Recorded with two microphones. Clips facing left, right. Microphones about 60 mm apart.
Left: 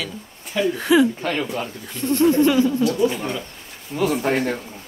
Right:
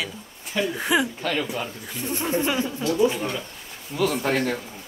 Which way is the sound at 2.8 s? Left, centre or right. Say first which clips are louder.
Left 2 dB; centre.